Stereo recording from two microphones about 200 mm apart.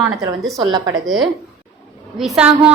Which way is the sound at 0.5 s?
20° right (ahead or behind).